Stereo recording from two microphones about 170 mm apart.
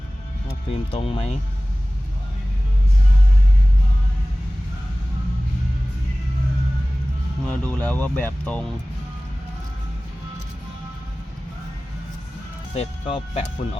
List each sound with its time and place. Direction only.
0.7 s speech: 35° left (ahead or behind)
7.4 s speech: 5° left (ahead or behind)
12.7 s speech: 35° left (ahead or behind)